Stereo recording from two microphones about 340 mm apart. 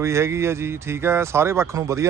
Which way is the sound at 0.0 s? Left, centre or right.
Centre.